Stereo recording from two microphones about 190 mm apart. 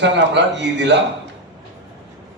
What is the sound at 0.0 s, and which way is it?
Speech, 65° right (ahead or behind).